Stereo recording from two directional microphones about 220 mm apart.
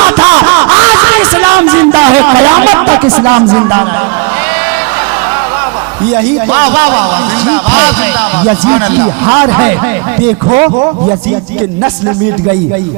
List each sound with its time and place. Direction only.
0.0 s a sound: 20° right (ahead or behind)
3.0 s speech: 20° right (ahead or behind)
6.1 s speech: 15° right (ahead or behind)
9.2 s speech: 25° right (ahead or behind)
9.5 s speech: 15° right (ahead or behind)
10.5 s speech: 25° right (ahead or behind)